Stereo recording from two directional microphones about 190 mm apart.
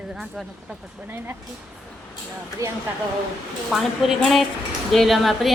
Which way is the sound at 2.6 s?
15° right (ahead or behind).